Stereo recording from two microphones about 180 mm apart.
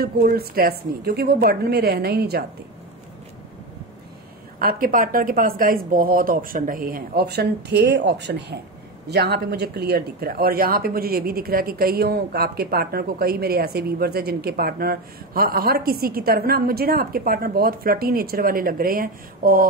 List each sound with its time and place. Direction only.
0.0 s speech: 55° right (ahead or behind)
4.6 s speech: 50° right (ahead or behind)